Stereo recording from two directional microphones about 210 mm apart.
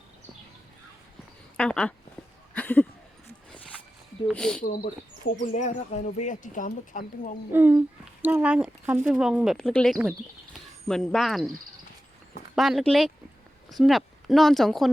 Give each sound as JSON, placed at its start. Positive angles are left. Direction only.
{"t": 1.5, "sound": "speech", "side_deg": 5}
{"t": 2.6, "sound": "a sound", "side_deg": 10}
{"t": 4.3, "sound": "speech", "side_deg": 5}
{"t": 5.5, "sound": "speech", "side_deg": 35}
{"t": 7.5, "sound": "speech", "side_deg": -10}
{"t": 12.5, "sound": "speech", "side_deg": 0}